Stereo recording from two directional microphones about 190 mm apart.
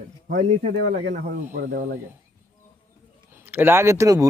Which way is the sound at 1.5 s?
45° right (ahead or behind).